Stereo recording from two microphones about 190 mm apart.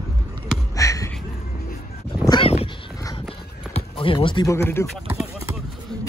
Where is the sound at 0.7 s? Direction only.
15° left (ahead or behind).